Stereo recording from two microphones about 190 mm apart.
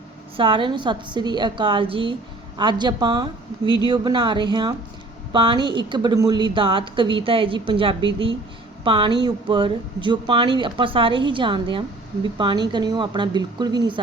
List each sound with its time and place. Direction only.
0.3 s a woman's voice: 25° right (ahead or behind)